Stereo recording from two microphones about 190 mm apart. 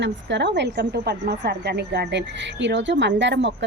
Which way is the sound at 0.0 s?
65° right (ahead or behind).